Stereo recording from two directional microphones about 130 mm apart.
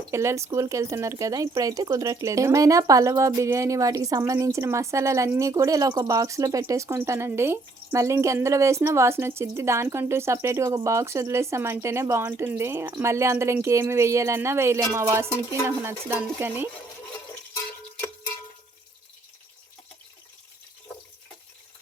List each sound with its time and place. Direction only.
0.1 s speech: 20° right (ahead or behind)